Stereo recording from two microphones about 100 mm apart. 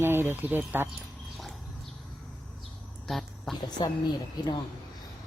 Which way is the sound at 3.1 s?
5° left (ahead or behind).